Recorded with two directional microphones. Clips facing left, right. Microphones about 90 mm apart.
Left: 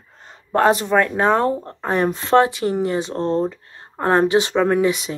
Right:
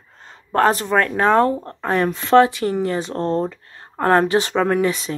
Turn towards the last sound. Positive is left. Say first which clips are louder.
# left 1 dB
turn(degrees=20)  # may be behind; listen again after turning